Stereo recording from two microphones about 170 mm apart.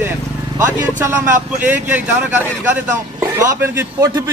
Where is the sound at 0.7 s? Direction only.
15° right (ahead or behind).